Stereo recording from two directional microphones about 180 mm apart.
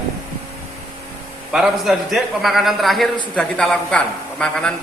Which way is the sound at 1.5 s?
Centre (ahead or behind).